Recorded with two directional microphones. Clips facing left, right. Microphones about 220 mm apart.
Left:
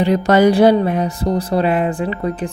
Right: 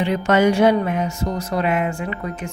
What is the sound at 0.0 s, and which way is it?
A woman's voice, 35° left (ahead or behind).